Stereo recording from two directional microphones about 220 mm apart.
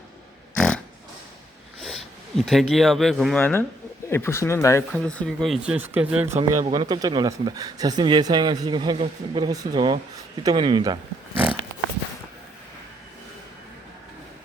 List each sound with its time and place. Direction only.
1.8 s speech: centre (ahead or behind)
6.5 s speech: 15° right (ahead or behind)